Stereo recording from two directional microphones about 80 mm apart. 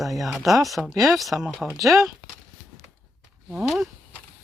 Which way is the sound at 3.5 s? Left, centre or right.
Centre.